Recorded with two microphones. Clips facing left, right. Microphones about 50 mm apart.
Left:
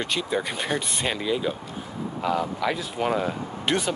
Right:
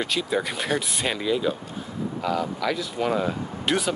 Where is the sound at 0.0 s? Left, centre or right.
Centre; by 3.1 s left.